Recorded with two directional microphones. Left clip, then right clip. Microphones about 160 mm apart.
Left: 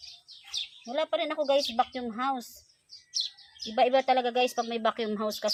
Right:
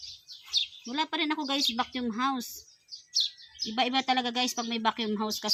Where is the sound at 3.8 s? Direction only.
35° left (ahead or behind).